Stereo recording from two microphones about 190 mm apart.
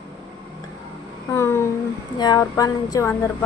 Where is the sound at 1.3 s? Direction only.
15° left (ahead or behind).